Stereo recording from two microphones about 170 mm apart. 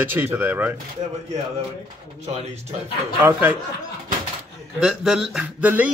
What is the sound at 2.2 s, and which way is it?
Speech, 40° right (ahead or behind).